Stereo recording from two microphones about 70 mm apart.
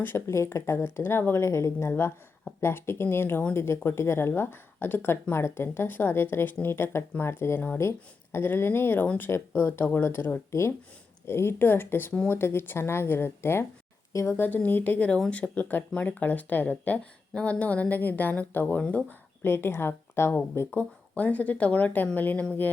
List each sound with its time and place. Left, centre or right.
0.0 s speech: left
0.3 s speech: left
10.5 s speech: left
19.4 s speech: left